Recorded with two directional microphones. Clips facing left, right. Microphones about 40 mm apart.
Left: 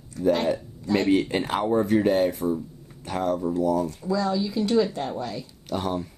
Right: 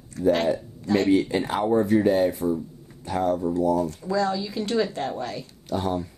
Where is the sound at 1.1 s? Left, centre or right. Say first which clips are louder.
Right 1 dB; left.